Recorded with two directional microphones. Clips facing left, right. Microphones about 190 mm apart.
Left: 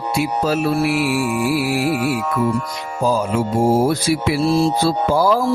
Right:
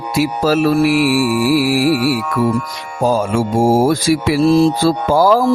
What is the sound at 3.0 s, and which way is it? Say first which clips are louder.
Music: right 3 dB; 75° right (ahead or behind).